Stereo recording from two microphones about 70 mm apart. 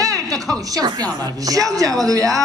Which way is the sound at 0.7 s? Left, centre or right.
Right.